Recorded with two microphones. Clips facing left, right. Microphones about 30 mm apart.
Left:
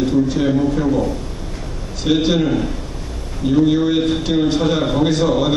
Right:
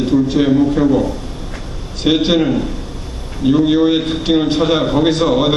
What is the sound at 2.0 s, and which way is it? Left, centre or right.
A man's voice, right.